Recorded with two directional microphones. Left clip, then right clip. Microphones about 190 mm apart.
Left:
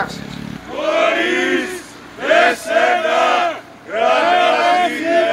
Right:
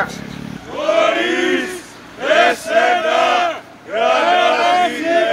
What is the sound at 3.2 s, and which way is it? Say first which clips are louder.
Battle cry: even; 45° right (ahead or behind).